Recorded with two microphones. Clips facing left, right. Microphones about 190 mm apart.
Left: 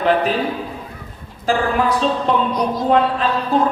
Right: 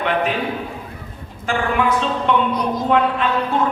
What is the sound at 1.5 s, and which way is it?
A man's voice, 35° left (ahead or behind).